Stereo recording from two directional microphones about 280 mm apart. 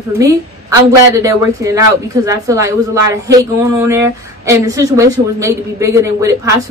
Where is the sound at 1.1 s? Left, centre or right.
Centre.